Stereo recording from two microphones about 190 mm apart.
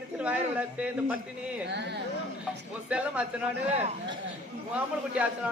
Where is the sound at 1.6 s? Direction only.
65° right (ahead or behind).